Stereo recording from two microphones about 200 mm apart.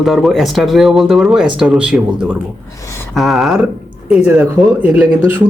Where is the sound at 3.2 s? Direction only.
Centre (ahead or behind).